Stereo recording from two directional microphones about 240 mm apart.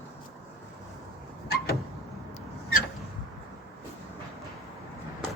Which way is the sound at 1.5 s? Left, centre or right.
Left.